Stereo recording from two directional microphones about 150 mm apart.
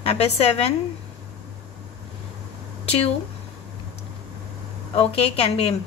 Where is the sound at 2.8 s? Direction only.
45° left (ahead or behind).